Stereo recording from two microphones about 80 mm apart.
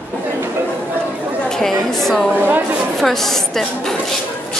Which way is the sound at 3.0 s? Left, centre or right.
Centre.